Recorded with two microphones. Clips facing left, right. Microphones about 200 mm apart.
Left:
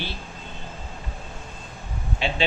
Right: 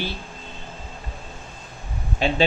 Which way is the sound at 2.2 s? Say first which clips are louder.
Right 5 dB; 45° right (ahead or behind).